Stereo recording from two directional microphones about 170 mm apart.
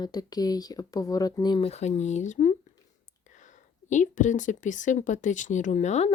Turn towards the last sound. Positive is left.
turn(degrees=40)  # may be behind; listen again after turning